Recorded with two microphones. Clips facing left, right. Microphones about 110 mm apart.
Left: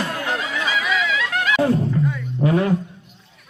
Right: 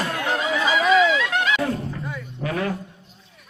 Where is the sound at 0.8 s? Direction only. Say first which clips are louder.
Right 10 dB; 35° right (ahead or behind).